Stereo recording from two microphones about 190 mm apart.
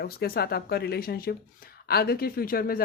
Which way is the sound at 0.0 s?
55° left (ahead or behind).